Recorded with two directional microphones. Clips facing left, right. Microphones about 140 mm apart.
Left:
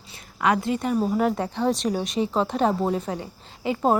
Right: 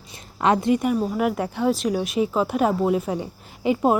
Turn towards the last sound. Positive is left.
turn(degrees=-15)  # may be behind; listen again after turning